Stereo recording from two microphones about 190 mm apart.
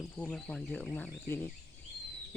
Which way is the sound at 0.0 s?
5° left (ahead or behind).